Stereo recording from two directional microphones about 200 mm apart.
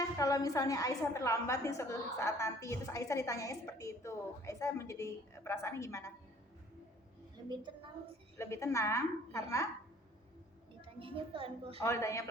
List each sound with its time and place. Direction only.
0.2 s a woman's voice: 15° left (ahead or behind)
7.5 s a woman's voice: 25° right (ahead or behind)
8.4 s a woman's voice: 15° left (ahead or behind)
10.8 s a woman's voice: 25° right (ahead or behind)
11.8 s a woman's voice: 15° left (ahead or behind)